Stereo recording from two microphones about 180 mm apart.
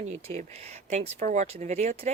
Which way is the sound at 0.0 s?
40° right (ahead or behind).